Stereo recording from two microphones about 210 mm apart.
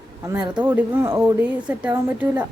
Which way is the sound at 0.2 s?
15° right (ahead or behind).